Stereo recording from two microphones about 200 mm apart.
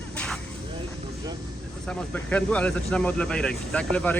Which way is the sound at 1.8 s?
5° left (ahead or behind).